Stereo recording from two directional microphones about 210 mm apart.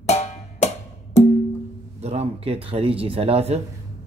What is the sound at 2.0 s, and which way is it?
Speech, 30° right (ahead or behind).